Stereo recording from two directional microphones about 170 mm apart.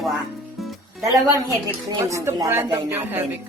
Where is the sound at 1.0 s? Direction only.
20° right (ahead or behind).